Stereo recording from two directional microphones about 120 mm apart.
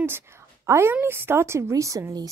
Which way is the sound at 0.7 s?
20° right (ahead or behind).